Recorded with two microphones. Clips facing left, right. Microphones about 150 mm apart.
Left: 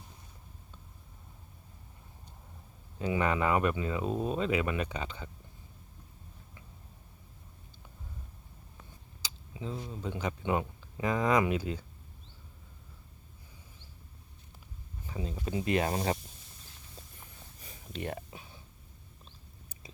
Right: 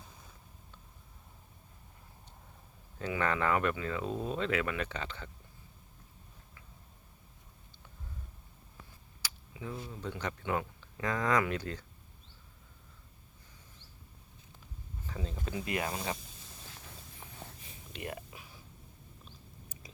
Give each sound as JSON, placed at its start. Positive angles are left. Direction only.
{"t": 3.0, "sound": "speech", "side_deg": 15}
{"t": 9.2, "sound": "a sound", "side_deg": 20}
{"t": 10.0, "sound": "speech", "side_deg": 10}
{"t": 15.0, "sound": "speech", "side_deg": 15}
{"t": 15.4, "sound": "speech", "side_deg": 25}
{"t": 16.6, "sound": "clip-clop", "side_deg": -90}
{"t": 17.6, "sound": "a sound", "side_deg": 40}